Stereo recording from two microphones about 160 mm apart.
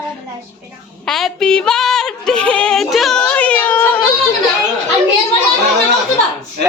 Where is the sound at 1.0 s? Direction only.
Centre (ahead or behind).